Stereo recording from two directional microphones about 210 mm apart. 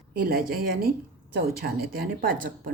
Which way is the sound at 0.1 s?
45° right (ahead or behind).